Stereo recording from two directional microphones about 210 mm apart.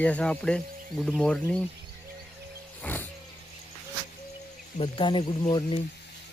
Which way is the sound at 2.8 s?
10° left (ahead or behind).